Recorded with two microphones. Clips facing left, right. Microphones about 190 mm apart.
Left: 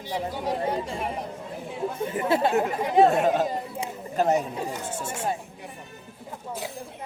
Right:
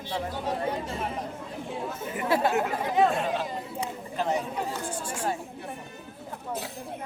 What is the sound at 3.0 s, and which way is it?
A woman's voice, 45° left (ahead or behind).